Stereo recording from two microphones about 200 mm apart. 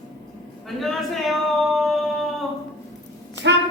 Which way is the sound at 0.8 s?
Centre (ahead or behind).